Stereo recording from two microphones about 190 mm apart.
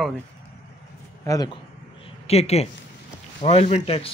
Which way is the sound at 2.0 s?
35° left (ahead or behind).